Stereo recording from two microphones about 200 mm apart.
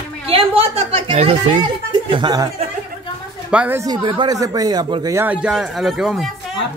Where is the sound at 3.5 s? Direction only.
5° right (ahead or behind).